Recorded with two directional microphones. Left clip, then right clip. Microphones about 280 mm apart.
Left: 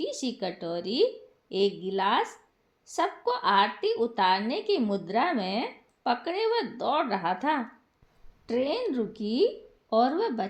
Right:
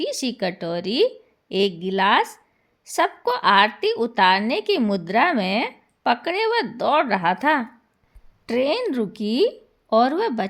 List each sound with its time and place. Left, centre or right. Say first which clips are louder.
0.0 s a woman's voice: right 7 dB; right